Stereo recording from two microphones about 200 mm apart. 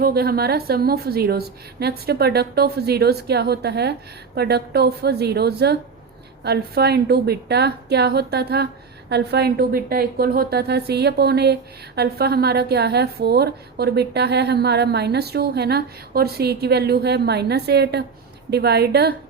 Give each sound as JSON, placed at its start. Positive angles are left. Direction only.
{"t": 0.0, "sound": "a woman's voice", "side_deg": -50}